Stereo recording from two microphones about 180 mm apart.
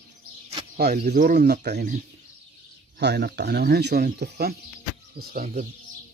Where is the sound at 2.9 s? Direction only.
65° right (ahead or behind).